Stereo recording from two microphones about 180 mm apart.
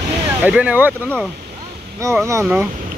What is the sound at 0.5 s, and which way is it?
Speech, 5° right (ahead or behind).